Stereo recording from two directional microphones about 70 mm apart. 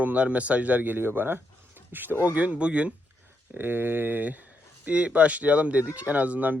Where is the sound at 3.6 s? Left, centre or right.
Right.